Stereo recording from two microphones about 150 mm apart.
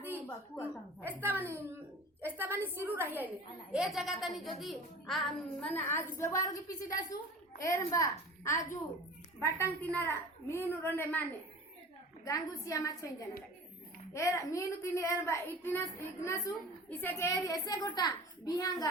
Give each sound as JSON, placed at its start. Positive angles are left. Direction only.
{"t": 0.0, "sound": "a sound", "side_deg": -15}
{"t": 1.0, "sound": "a woman's voice", "side_deg": -15}
{"t": 6.1, "sound": "a child's voice", "side_deg": 20}